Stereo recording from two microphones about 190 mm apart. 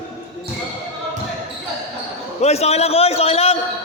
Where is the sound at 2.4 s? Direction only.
35° left (ahead or behind).